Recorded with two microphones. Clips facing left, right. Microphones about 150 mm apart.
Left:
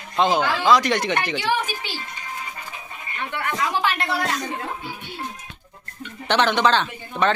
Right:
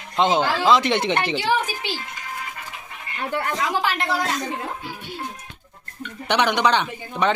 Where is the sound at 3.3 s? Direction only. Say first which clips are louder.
Right 3 dB; 35° right (ahead or behind).